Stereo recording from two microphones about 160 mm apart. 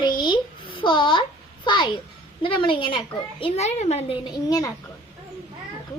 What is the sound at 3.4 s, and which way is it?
Speech, 40° left (ahead or behind).